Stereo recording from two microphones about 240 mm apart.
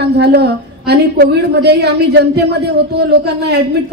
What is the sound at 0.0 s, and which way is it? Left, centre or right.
A woman's voice, right.